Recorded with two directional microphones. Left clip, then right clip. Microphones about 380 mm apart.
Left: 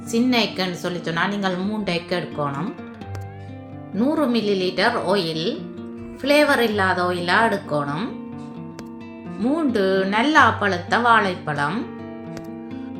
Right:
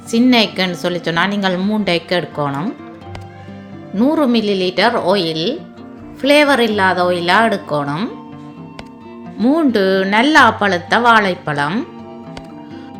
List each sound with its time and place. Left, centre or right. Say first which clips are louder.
0.1 s a woman's voice: right 7 dB; centre
3.9 s a woman's voice: right 6 dB; centre
9.4 s a woman's voice: right 7 dB; right